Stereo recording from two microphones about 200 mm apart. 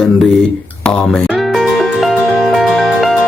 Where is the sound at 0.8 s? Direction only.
5° left (ahead or behind).